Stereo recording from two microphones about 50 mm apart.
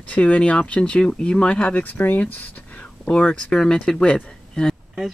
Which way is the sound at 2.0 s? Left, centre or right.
Left.